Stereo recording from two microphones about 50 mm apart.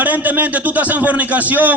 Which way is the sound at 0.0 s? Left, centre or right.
Right.